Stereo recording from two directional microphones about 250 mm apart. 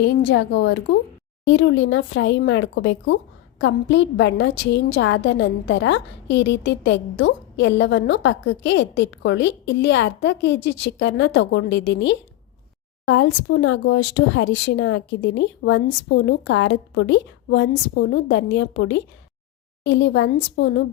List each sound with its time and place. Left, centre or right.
0.1 s a woman's voice: left